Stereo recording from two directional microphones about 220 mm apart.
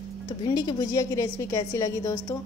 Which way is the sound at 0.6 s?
20° left (ahead or behind).